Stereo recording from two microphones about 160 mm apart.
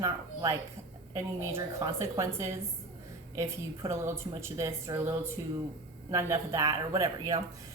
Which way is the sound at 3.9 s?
15° right (ahead or behind).